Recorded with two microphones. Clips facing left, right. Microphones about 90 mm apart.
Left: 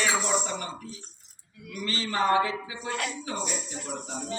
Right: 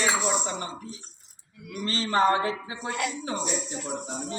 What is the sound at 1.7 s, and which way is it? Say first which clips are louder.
Speech: right 4 dB; 35° right (ahead or behind).